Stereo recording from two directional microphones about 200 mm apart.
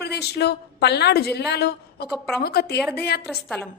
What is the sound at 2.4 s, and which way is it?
Speech, 50° left (ahead or behind).